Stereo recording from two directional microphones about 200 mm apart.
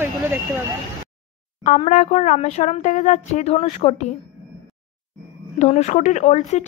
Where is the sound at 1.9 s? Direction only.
40° left (ahead or behind).